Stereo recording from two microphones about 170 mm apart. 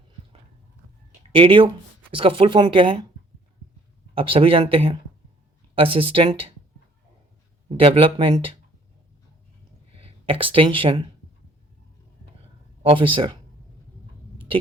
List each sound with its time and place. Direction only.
1.3 s speech: 30° right (ahead or behind)
4.1 s speech: 30° right (ahead or behind)
7.8 s speech: 35° right (ahead or behind)
10.0 s speech: 35° right (ahead or behind)
12.8 s speech: 30° right (ahead or behind)
14.3 s a sound: 30° right (ahead or behind)